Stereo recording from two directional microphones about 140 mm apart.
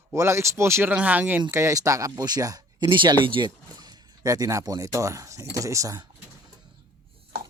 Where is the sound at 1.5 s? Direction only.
25° right (ahead or behind).